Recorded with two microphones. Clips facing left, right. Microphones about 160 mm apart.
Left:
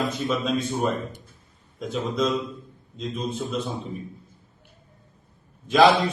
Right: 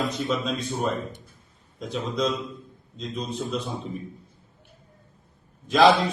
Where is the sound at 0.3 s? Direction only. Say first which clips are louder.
Left 2 dB; centre (ahead or behind).